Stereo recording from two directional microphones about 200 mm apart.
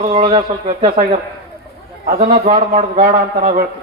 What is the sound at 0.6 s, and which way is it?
A man's voice, 40° right (ahead or behind).